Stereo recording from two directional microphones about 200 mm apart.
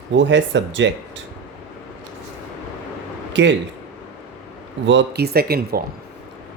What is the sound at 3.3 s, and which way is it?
Speech, 65° right (ahead or behind).